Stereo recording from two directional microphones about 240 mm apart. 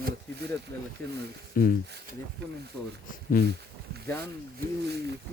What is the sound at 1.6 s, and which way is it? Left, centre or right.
Speech, left.